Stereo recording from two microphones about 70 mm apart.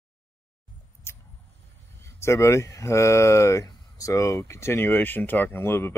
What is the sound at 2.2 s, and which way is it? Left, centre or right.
Speech, left.